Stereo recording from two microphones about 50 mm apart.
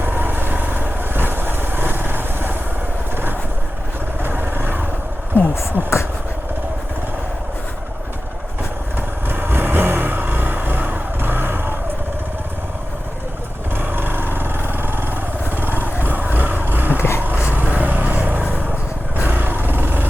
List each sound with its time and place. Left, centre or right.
0.0 s vehicle: right
4.2 s vehicle: right
5.3 s a sound: left
5.8 s speech: right
9.0 s vehicle: right
13.7 s vehicle: right